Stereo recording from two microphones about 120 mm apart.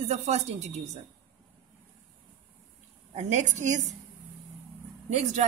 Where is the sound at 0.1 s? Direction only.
70° right (ahead or behind).